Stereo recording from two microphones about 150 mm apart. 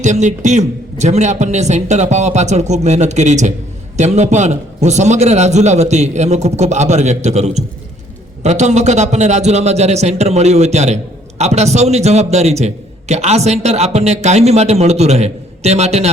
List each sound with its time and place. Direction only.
0.0 s a man's voice: 55° right (ahead or behind)